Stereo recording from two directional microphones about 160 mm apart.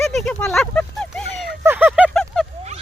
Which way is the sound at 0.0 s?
Centre (ahead or behind).